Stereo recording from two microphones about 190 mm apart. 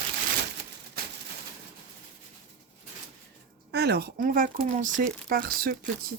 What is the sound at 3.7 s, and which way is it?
Speech, 60° right (ahead or behind).